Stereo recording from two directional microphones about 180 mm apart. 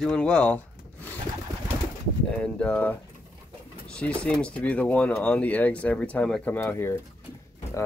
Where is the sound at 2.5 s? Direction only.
5° left (ahead or behind).